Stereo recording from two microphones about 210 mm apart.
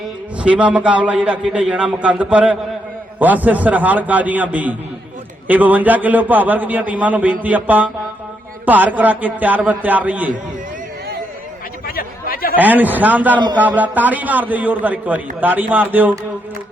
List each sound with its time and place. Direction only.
0.3 s a man's voice: 5° right (ahead or behind)
11.9 s chatter: 45° left (ahead or behind)
12.5 s a man's voice: 10° right (ahead or behind)